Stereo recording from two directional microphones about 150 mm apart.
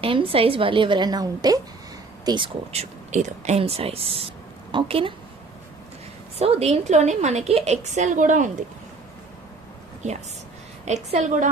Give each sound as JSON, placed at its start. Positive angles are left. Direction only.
{"t": 0.0, "sound": "a woman's voice", "side_deg": -35}
{"t": 2.7, "sound": "a woman's voice", "side_deg": -50}
{"t": 6.4, "sound": "a woman's voice", "side_deg": -45}
{"t": 10.8, "sound": "a woman's voice", "side_deg": -50}